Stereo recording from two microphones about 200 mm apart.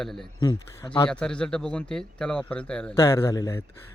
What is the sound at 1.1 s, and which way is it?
Speech, 5° left (ahead or behind).